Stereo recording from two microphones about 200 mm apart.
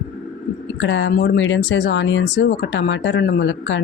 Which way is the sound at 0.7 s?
65° left (ahead or behind).